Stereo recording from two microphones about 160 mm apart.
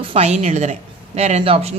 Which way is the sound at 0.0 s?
35° right (ahead or behind).